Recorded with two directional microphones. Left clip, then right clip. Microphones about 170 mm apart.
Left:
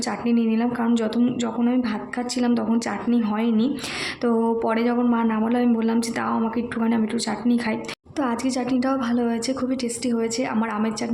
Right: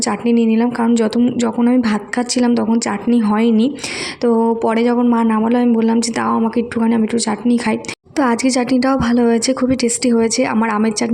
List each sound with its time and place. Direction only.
0.0 s a woman's voice: 30° right (ahead or behind)
4.2 s a woman's voice: 20° right (ahead or behind)